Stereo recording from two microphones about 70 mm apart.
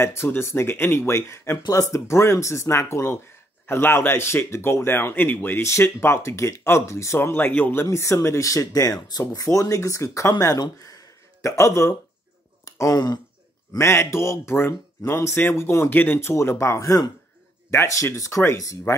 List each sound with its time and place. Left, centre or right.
0.0 s speech: left
3.6 s speech: left
5.6 s speech: left
7.2 s speech: left
7.8 s speech: left
11.4 s speech: left
13.7 s speech: left
16.2 s speech: left